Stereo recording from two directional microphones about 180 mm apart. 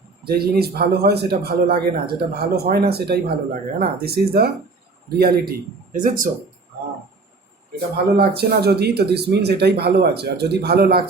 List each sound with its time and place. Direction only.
0.3 s speech: 60° right (ahead or behind)
8.1 s speech: 60° right (ahead or behind)